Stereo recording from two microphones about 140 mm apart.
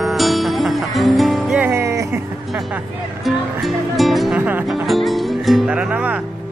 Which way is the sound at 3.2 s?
Centre (ahead or behind).